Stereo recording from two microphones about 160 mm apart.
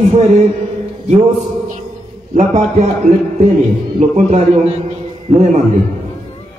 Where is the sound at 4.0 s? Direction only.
45° right (ahead or behind).